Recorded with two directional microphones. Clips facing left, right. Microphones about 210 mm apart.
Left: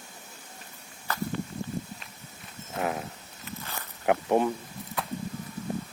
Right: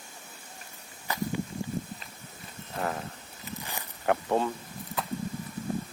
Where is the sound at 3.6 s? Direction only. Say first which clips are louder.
Left 1 dB; 15° right (ahead or behind).